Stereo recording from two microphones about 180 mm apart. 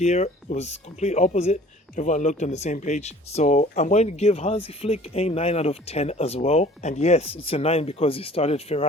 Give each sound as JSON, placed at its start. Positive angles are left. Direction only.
{"t": 0.0, "sound": "speech", "side_deg": 40}